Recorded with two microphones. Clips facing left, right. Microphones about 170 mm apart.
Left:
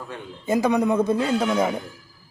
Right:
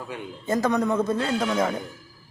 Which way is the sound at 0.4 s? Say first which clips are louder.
Left 3 dB; 10° left (ahead or behind).